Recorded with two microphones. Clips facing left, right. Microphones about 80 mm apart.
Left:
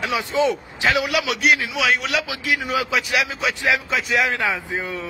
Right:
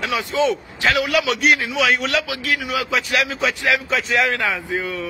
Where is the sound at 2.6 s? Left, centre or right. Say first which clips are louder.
Left 1 dB; left.